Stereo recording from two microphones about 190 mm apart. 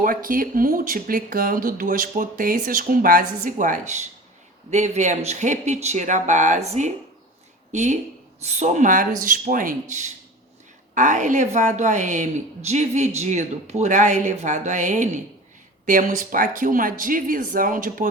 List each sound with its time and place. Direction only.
0.0 s speech: 45° right (ahead or behind)
10.9 s speech: 40° right (ahead or behind)